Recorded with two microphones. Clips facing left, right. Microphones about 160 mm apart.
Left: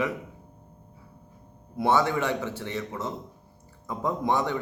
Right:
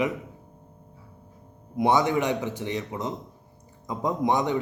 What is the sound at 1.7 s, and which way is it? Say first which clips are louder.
A man's voice: right 2 dB; 15° right (ahead or behind).